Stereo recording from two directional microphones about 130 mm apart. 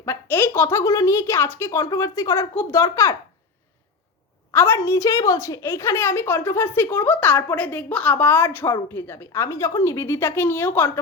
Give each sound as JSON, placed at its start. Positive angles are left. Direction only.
{"t": 0.0, "sound": "a woman's voice", "side_deg": 20}
{"t": 4.5, "sound": "a woman's voice", "side_deg": 20}